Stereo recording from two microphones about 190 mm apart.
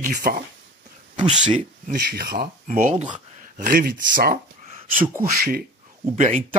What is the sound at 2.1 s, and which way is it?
Speech, 55° right (ahead or behind).